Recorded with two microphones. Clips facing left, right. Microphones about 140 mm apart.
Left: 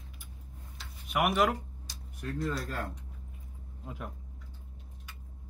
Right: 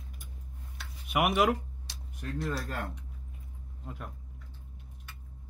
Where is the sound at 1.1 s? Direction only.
5° right (ahead or behind).